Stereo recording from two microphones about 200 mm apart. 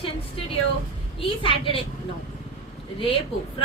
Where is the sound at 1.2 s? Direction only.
25° left (ahead or behind).